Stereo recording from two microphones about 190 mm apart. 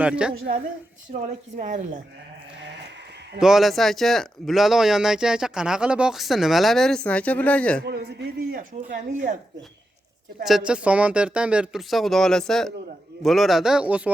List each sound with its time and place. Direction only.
0.0 s speech: 5° right (ahead or behind)
1.2 s speech: 40° right (ahead or behind)
3.4 s speech: centre (ahead or behind)
7.9 s speech: 60° right (ahead or behind); by 9.4 s 40° right (ahead or behind)
10.4 s speech: 5° right (ahead or behind)